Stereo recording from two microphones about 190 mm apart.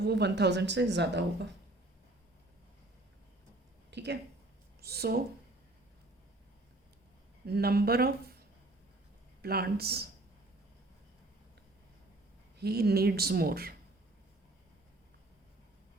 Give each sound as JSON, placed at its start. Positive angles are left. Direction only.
{"t": 0.0, "sound": "speech", "side_deg": -60}
{"t": 3.9, "sound": "speech", "side_deg": -65}
{"t": 7.4, "sound": "speech", "side_deg": -55}
{"t": 9.4, "sound": "speech", "side_deg": -55}
{"t": 12.5, "sound": "speech", "side_deg": -60}